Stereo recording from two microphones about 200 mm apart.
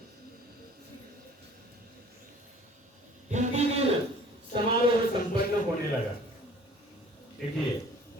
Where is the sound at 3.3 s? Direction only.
35° right (ahead or behind).